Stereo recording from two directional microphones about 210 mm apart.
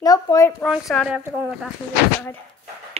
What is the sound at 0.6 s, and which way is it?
Speech, centre (ahead or behind).